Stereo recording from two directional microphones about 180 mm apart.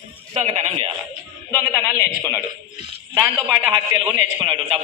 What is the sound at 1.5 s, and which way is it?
Speech, 10° left (ahead or behind).